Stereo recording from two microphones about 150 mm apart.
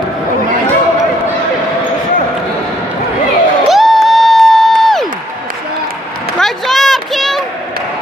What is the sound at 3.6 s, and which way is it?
Music, centre (ahead or behind).